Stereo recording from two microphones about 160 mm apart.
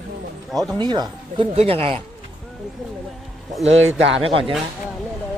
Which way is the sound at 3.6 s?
40° right (ahead or behind).